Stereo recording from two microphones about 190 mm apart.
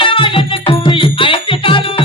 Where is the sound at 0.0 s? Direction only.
25° left (ahead or behind).